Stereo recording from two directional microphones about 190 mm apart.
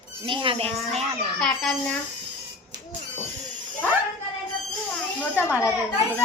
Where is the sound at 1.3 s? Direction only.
5° left (ahead or behind).